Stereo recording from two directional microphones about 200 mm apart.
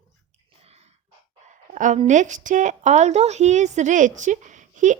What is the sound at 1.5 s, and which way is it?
A woman's voice, 40° right (ahead or behind).